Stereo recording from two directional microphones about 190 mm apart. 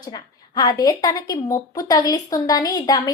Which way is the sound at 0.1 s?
20° left (ahead or behind).